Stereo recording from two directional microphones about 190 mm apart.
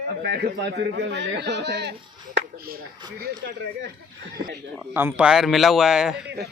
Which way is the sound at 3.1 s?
55° right (ahead or behind).